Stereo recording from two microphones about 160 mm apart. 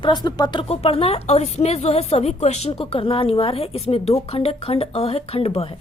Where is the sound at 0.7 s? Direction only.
40° left (ahead or behind).